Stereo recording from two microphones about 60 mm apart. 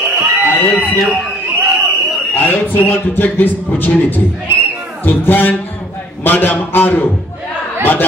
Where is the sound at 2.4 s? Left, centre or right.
Left.